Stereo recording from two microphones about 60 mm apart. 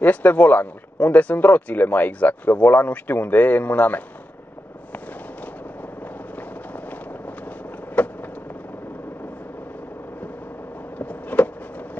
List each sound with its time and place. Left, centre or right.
0.0 s speech: left
4.9 s fireworks: left
11.0 s a sound: left